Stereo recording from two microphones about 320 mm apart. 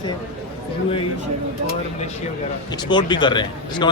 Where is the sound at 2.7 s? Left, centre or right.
Centre.